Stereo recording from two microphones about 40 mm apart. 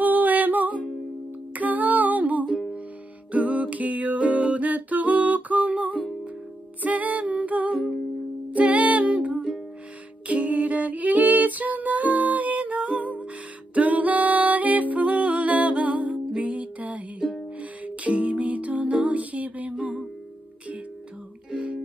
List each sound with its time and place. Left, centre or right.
0.0 s music: right
6.8 s humming: right
8.5 s music: right
19.7 s music: right
21.5 s music: right